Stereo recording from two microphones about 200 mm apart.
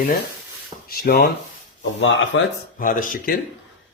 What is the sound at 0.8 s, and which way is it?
Speech, 50° left (ahead or behind).